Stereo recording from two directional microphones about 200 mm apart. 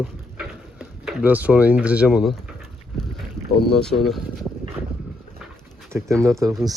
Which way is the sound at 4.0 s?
Centre (ahead or behind).